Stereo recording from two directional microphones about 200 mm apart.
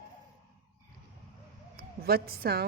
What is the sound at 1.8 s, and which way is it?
Speech, 50° right (ahead or behind).